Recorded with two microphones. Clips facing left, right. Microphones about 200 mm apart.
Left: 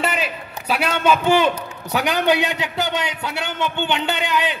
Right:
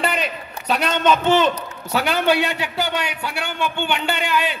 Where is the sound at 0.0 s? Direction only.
5° left (ahead or behind).